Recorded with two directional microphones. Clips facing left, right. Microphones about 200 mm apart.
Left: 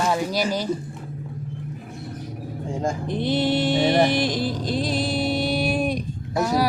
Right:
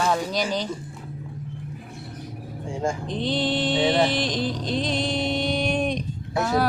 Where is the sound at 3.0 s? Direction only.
10° left (ahead or behind).